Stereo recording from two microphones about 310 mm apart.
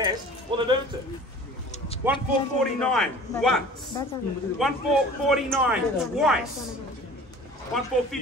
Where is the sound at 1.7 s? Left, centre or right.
Centre.